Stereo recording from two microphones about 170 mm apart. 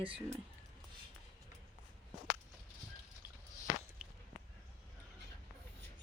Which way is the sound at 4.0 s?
5° right (ahead or behind).